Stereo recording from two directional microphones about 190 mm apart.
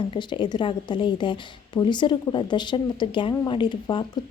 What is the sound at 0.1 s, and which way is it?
Speech, 25° left (ahead or behind).